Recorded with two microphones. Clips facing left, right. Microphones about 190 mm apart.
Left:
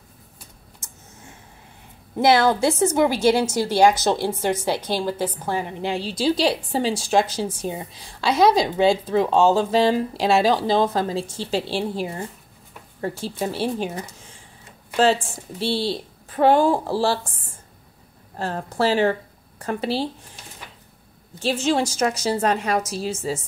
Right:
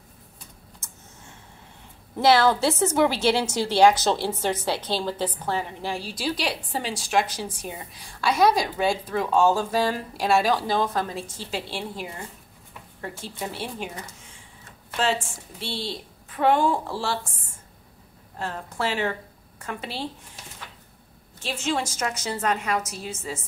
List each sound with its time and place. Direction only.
2.1 s a woman's voice: 15° left (ahead or behind); by 14.0 s 30° left (ahead or behind)
15.6 s a woman's voice: 35° left (ahead or behind)
18.4 s a woman's voice: 35° left (ahead or behind)
21.4 s a woman's voice: 35° left (ahead or behind)